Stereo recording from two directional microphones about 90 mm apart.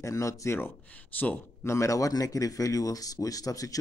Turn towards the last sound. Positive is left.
turn(degrees=40)  # may be behind; listen again after turning